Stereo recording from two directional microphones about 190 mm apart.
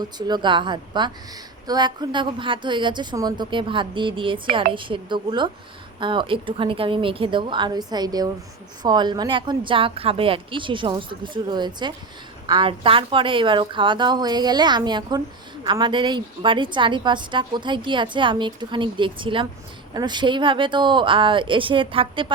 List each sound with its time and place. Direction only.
0.2 s a woman's voice: 20° right (ahead or behind)